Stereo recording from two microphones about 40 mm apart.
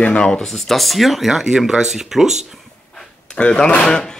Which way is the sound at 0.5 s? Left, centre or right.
Centre.